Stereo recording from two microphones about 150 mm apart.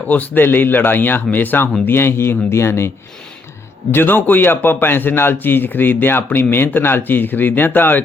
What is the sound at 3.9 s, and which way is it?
A man's voice, 15° left (ahead or behind).